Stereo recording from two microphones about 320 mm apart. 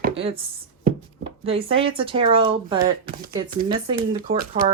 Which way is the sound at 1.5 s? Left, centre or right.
Centre.